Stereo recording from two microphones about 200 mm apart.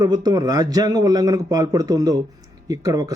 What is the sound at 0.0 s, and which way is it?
Speech, 20° right (ahead or behind).